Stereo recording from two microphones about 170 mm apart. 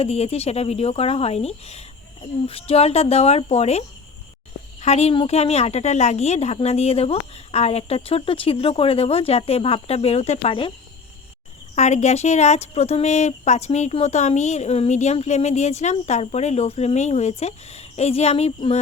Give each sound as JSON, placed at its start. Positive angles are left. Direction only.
{"t": 0.0, "sound": "speech", "side_deg": 35}
{"t": 11.7, "sound": "speech", "side_deg": 40}